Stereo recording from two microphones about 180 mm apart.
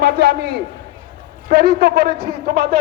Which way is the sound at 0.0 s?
60° right (ahead or behind).